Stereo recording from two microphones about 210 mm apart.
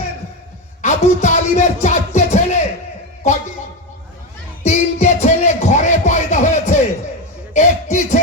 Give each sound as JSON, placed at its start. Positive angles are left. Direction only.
{"t": 0.8, "sound": "music", "side_deg": 35}
{"t": 4.6, "sound": "music", "side_deg": 35}
{"t": 7.5, "sound": "a sound", "side_deg": 35}